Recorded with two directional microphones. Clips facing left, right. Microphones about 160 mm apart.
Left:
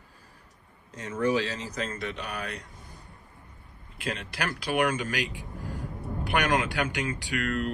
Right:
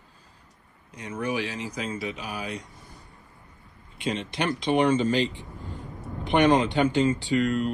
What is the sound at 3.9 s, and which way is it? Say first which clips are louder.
Speech: right 5 dB; centre (ahead or behind).